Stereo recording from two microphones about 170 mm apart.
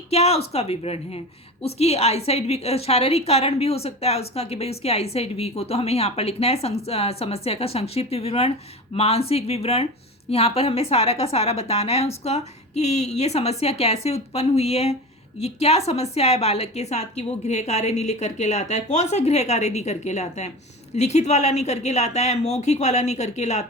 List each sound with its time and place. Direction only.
0.1 s a woman's voice: 35° left (ahead or behind)